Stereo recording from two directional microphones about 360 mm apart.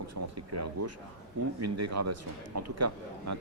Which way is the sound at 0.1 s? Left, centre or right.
Right.